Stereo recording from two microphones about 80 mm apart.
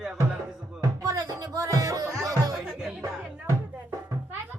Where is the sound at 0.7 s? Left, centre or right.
Right.